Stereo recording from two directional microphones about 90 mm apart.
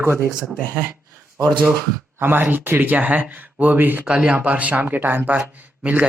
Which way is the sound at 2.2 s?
20° right (ahead or behind).